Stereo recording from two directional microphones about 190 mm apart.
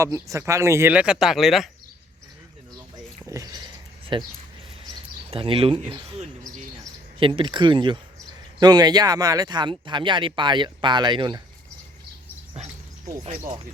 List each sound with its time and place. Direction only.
0.0 s speech: 15° right (ahead or behind)
3.2 s a sound: 20° right (ahead or behind)
4.1 s speech: 25° right (ahead or behind)
5.3 s speech: 30° right (ahead or behind)
13.2 s speech: 40° right (ahead or behind)